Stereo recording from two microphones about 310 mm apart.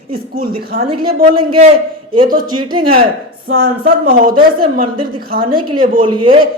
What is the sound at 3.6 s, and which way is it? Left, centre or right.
Speech, right.